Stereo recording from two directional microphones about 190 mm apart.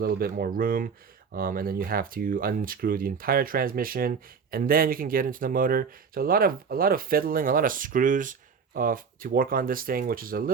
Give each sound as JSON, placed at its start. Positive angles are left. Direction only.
{"t": 0.0, "sound": "speech", "side_deg": -50}